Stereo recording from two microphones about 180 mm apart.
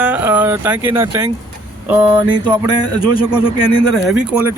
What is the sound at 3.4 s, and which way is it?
Speech, 30° left (ahead or behind).